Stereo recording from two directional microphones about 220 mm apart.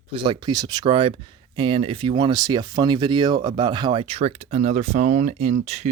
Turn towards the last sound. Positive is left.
turn(degrees=-30)  # may be behind; listen again after turning